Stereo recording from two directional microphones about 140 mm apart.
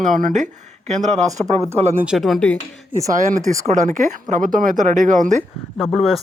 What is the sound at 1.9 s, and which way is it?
Speech, 5° right (ahead or behind).